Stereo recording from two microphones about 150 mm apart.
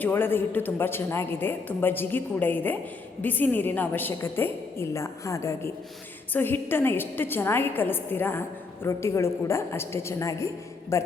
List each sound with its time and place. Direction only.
0.0 s a woman's voice: 15° left (ahead or behind)